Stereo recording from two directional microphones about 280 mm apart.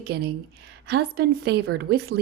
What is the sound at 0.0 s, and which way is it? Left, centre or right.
A woman's voice, right.